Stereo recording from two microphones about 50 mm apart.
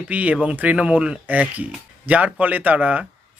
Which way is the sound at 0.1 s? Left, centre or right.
Right.